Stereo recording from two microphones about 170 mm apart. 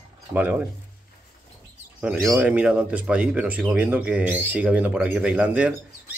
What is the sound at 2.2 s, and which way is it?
Speech, 10° right (ahead or behind).